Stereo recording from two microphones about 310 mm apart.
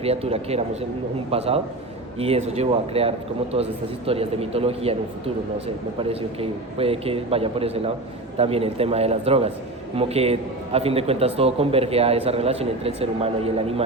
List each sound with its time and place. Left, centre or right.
0.0 s a man's voice: centre